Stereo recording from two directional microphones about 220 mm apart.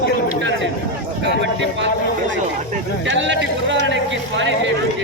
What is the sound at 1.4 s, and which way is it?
Speech, 55° right (ahead or behind).